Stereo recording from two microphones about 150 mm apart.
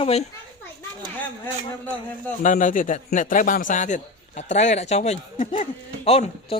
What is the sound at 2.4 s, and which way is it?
A man's voice, 60° left (ahead or behind).